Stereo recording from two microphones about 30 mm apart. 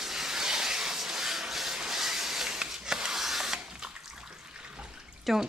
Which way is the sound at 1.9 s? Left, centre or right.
Centre.